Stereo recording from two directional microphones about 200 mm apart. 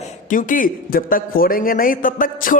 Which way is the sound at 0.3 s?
45° left (ahead or behind).